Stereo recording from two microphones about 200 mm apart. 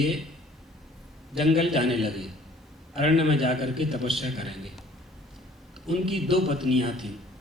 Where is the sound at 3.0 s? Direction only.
30° right (ahead or behind).